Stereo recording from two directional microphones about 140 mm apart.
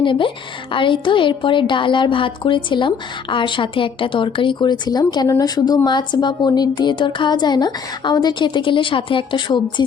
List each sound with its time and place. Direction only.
0.0 s a woman's voice: 35° left (ahead or behind)